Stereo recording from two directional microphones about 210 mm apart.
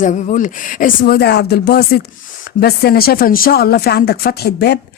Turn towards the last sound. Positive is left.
turn(degrees=50)  # may be behind; listen again after turning